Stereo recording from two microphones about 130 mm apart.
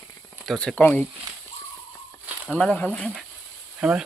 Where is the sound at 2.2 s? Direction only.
15° right (ahead or behind).